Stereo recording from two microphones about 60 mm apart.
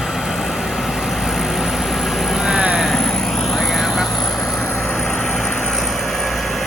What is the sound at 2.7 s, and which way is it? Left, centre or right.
Vehicle, centre.